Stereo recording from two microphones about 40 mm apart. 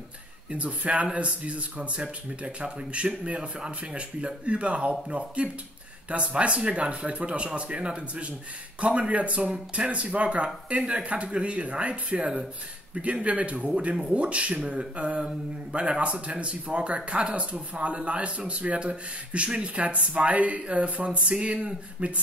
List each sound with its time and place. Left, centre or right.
0.5 s speech: right